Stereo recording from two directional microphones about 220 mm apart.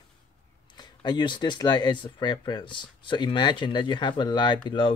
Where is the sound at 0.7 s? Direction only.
20° left (ahead or behind).